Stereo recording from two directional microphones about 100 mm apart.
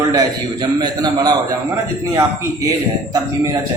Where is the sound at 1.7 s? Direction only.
30° right (ahead or behind).